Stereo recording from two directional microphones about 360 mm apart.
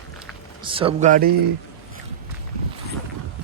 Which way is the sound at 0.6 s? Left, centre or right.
Centre.